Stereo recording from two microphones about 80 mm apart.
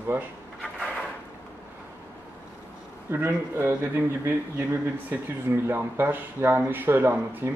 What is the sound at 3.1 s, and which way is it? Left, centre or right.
Speech, right.